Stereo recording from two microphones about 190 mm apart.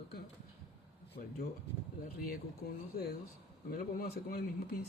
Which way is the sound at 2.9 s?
55° left (ahead or behind).